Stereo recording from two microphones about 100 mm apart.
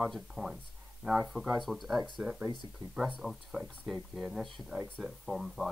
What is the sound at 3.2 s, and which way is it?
Speech, centre (ahead or behind).